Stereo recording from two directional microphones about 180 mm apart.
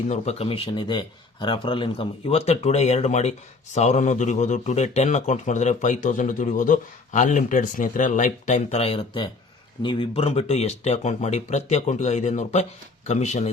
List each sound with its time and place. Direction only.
0.1 s speech: 35° left (ahead or behind)